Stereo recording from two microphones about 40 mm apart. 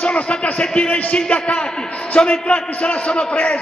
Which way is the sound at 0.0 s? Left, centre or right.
Left.